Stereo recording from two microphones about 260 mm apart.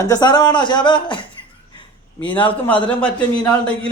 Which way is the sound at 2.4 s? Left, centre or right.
Centre.